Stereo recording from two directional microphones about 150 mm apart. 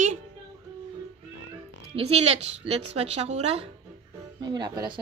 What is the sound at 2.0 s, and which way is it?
Speech, 45° right (ahead or behind).